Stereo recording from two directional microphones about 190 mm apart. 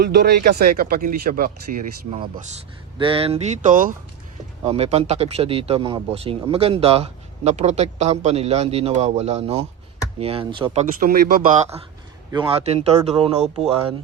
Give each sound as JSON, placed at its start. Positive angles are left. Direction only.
{"t": 0.0, "sound": "speech", "side_deg": -60}
{"t": 2.0, "sound": "speech", "side_deg": -25}
{"t": 4.6, "sound": "speech", "side_deg": -35}
{"t": 11.0, "sound": "speech", "side_deg": -45}
{"t": 12.3, "sound": "speech", "side_deg": -25}